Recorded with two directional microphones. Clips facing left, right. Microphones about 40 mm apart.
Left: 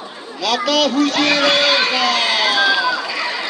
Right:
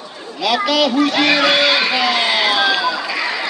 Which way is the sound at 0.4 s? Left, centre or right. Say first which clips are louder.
Right 1 dB; centre.